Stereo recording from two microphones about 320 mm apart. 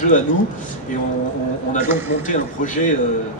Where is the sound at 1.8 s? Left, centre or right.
Centre.